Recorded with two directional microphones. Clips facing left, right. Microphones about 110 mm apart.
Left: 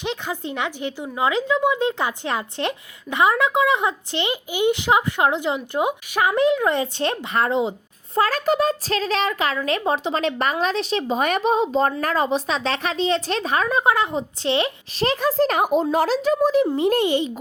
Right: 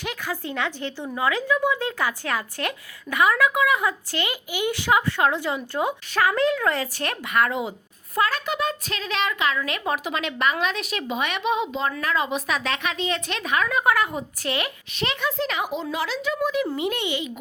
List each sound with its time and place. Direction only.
0.0 s a woman's voice: 20° left (ahead or behind)
11.2 s a woman's voice: 40° left (ahead or behind)